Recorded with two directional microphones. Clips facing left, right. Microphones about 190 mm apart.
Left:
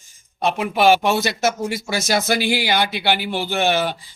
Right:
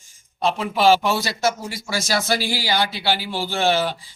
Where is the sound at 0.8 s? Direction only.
20° left (ahead or behind).